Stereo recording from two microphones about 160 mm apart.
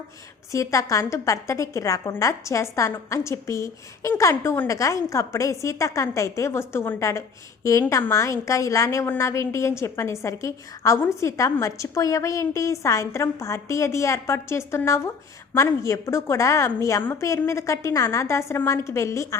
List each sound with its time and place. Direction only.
0.5 s a woman's voice: 20° left (ahead or behind)